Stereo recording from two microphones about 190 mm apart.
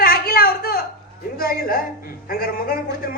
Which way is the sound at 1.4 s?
50° left (ahead or behind).